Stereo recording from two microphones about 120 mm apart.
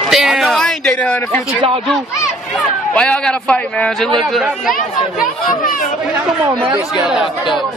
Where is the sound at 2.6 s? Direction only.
5° left (ahead or behind).